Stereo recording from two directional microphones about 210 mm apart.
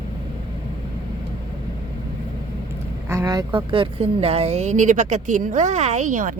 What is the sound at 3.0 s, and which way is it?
Speech, 15° right (ahead or behind).